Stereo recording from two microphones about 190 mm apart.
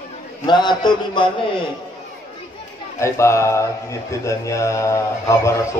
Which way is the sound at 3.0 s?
15° left (ahead or behind).